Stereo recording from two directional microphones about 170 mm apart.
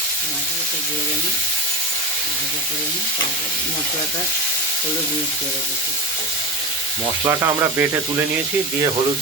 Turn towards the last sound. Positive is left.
turn(degrees=-15)  # may be behind; listen again after turning